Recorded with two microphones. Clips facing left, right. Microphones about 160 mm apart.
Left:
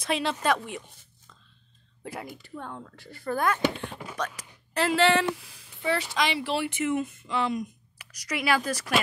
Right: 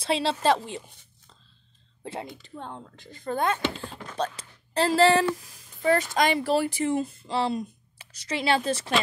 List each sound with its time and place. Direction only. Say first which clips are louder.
0.0 s speech: right 3 dB; 30° right (ahead or behind)
2.0 s speech: right 2 dB; 25° right (ahead or behind)
4.0 s speech: left 1 dB; 5° left (ahead or behind)
4.4 s speech: right 1 dB; 30° right (ahead or behind)